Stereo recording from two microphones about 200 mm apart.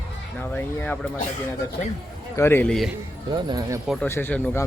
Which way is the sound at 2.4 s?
10° left (ahead or behind).